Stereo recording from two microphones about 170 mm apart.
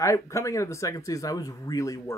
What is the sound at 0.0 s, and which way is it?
Speech, 15° left (ahead or behind).